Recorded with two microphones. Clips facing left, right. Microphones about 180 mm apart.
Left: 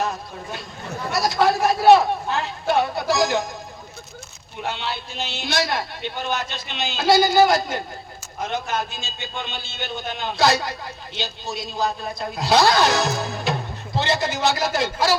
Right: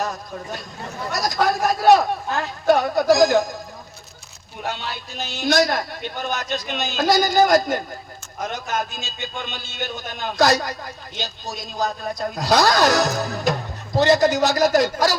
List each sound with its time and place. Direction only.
1.1 s a man's voice: 45° right (ahead or behind)
4.7 s a man's voice: 45° right (ahead or behind)